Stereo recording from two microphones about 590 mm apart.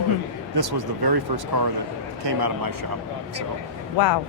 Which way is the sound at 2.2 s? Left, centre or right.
Right.